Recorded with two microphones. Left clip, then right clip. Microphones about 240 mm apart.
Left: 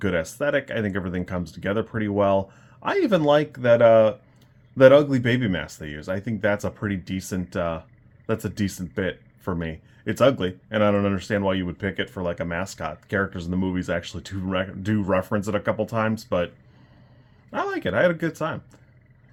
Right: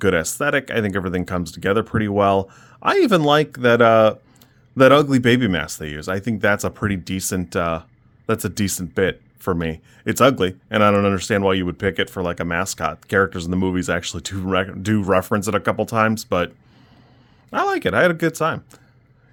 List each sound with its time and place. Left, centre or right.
0.0 s speech: right
17.5 s speech: right